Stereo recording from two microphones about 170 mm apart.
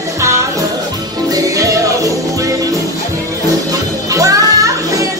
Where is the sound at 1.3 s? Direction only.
20° right (ahead or behind).